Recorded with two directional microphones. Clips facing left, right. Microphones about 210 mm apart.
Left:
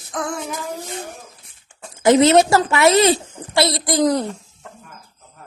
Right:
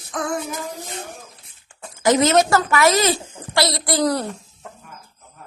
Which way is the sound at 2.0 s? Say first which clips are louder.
Left 4 dB; 25° left (ahead or behind).